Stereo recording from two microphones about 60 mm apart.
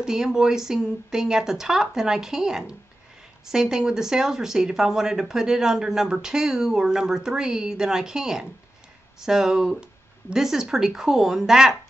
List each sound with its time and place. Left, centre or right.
0.0 s speech: centre